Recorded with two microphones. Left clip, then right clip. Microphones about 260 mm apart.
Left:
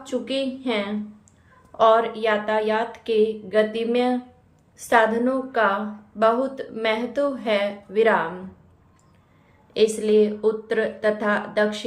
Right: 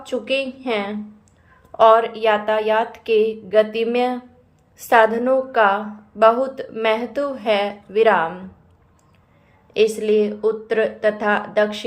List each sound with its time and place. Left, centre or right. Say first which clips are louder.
0.0 s a woman's voice: right 4 dB; centre
9.7 s a woman's voice: right 2 dB; centre